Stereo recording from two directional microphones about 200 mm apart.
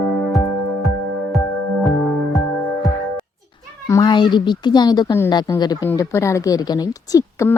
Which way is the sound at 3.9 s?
20° left (ahead or behind).